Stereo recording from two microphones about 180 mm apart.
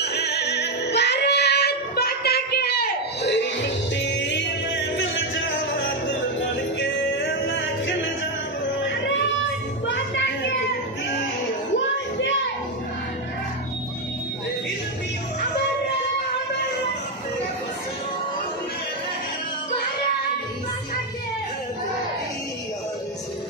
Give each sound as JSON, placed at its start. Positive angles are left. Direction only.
{"t": 0.0, "sound": "music", "side_deg": 65}
{"t": 3.9, "sound": "music", "side_deg": 85}
{"t": 8.8, "sound": "music", "side_deg": 80}